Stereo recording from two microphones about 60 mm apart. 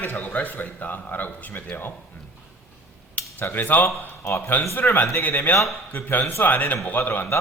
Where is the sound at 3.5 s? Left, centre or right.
Left.